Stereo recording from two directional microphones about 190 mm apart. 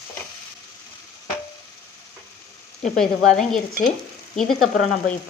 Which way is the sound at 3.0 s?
Centre (ahead or behind).